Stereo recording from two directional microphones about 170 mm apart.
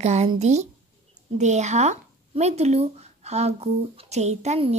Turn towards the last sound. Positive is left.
turn(degrees=-40)  # may be behind; listen again after turning